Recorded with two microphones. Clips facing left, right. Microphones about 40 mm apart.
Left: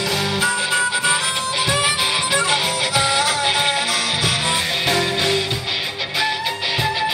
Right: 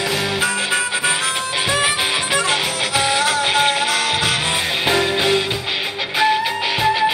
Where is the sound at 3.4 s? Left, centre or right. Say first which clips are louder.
Right 2 dB; right.